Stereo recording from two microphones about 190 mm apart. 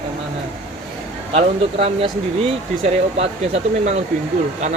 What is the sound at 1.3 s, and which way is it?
Speech, 30° right (ahead or behind).